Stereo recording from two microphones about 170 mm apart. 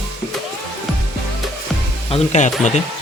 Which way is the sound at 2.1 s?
45° left (ahead or behind).